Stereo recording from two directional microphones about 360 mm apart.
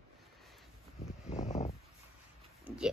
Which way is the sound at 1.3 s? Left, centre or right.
Centre.